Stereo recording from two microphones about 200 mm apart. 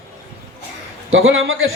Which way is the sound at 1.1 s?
75° right (ahead or behind).